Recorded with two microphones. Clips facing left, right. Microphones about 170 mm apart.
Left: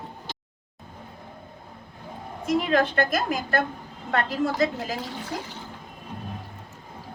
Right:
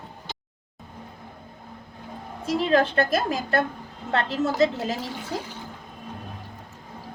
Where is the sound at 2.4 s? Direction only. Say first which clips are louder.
Right 1 dB; 30° right (ahead or behind).